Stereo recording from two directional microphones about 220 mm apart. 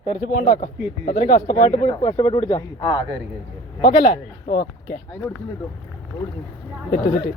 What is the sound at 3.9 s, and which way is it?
Speech, 30° left (ahead or behind).